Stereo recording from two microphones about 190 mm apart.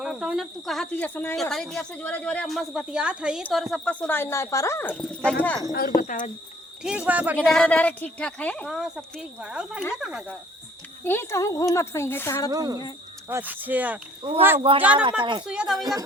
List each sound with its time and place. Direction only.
0.0 s speech: 5° right (ahead or behind)
6.0 s speech: 45° left (ahead or behind)
6.8 s speech: 5° right (ahead or behind)
7.3 s speech: 5° left (ahead or behind)
11.0 s speech: 10° left (ahead or behind)
12.5 s speech: 20° right (ahead or behind)
14.7 s speech: 30° right (ahead or behind)
15.4 s speech: 5° right (ahead or behind)
15.8 s speech: 20° right (ahead or behind)